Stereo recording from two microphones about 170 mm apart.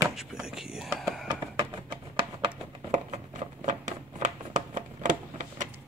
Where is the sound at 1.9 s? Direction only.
30° right (ahead or behind).